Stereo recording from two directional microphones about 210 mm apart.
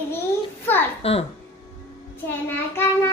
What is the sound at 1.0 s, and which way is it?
Speech, 30° left (ahead or behind).